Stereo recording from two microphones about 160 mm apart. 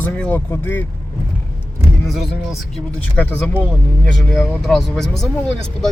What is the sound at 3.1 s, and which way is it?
Speech, 10° left (ahead or behind).